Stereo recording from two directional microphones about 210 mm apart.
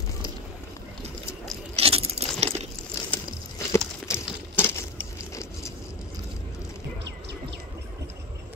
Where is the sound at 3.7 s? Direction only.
15° left (ahead or behind).